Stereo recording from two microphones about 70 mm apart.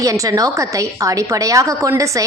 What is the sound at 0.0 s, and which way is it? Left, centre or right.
A woman's voice, right.